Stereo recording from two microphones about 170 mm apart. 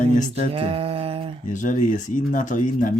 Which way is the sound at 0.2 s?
45° left (ahead or behind).